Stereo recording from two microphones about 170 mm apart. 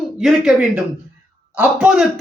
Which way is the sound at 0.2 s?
Centre (ahead or behind).